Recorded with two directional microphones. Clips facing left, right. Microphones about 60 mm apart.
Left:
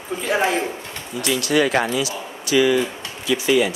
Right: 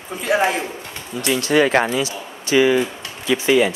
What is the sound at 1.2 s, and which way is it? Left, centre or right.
Speech, right.